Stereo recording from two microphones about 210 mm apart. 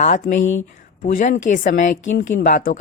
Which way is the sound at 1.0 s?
35° left (ahead or behind).